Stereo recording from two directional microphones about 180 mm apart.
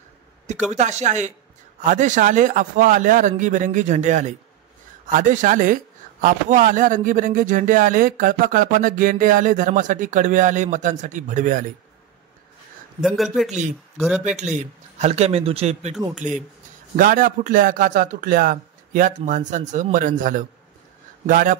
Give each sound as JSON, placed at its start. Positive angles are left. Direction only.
{"t": 0.7, "sound": "speech", "side_deg": -40}
{"t": 13.0, "sound": "a man's voice", "side_deg": 0}
{"t": 13.5, "sound": "speech", "side_deg": -40}
{"t": 13.9, "sound": "a man's voice", "side_deg": 0}
{"t": 14.4, "sound": "speech", "side_deg": -40}
{"t": 16.9, "sound": "speech", "side_deg": -50}